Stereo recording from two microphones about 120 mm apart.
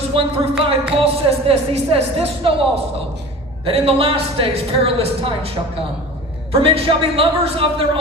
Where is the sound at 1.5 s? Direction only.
55° right (ahead or behind).